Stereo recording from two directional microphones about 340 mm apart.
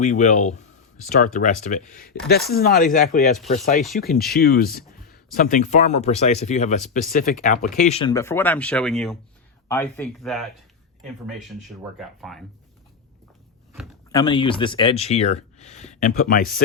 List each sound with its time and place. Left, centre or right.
0.0 s speech: left; by 12.5 s centre
14.1 s speech: centre